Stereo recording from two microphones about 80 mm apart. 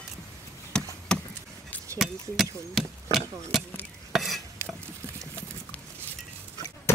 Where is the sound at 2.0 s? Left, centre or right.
Centre.